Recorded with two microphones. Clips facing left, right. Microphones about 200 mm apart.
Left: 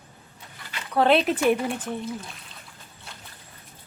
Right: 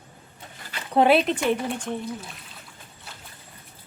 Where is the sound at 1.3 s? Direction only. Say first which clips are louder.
Left 2 dB; 5° left (ahead or behind).